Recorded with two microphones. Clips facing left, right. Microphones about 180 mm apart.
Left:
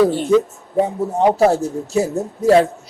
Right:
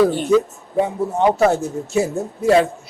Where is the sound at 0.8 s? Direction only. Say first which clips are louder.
Left 1 dB; 35° left (ahead or behind).